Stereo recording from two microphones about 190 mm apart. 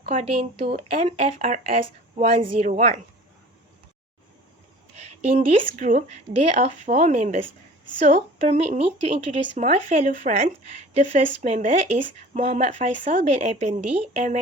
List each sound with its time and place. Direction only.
0.0 s speech: 35° right (ahead or behind)
5.2 s speech: 35° right (ahead or behind)